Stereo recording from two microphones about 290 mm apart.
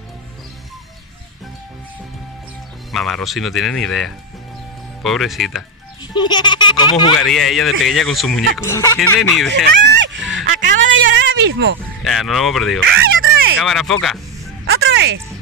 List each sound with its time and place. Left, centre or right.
2.9 s speech: centre
6.1 s speech: centre
7.2 s speech: centre
9.8 s a sound: right
12.0 s speech: centre
12.8 s a sound: right
13.6 s speech: centre
14.7 s music: right